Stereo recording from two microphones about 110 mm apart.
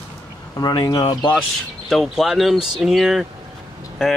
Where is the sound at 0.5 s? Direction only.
40° left (ahead or behind).